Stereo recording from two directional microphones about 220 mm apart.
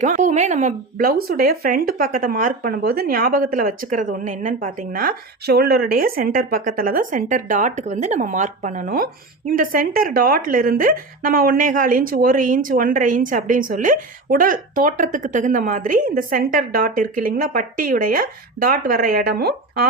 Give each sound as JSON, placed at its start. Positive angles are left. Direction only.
{"t": 0.0, "sound": "speech", "side_deg": -35}